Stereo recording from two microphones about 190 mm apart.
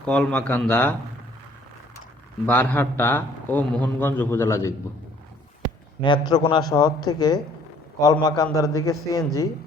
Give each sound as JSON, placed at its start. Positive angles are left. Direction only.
{"t": 0.0, "sound": "a man's voice", "side_deg": 5}
{"t": 2.5, "sound": "a man's voice", "side_deg": 10}
{"t": 6.0, "sound": "a man's voice", "side_deg": 20}